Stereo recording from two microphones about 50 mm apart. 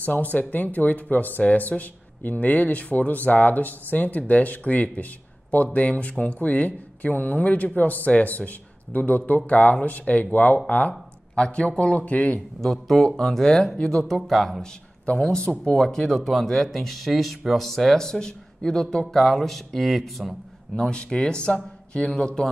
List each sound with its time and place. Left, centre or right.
0.0 s speech: left
12.5 s speech: centre
15.6 s speech: centre
20.9 s speech: left